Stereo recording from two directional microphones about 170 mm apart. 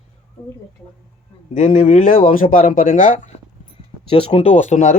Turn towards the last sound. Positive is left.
turn(degrees=40)  # may be behind; listen again after turning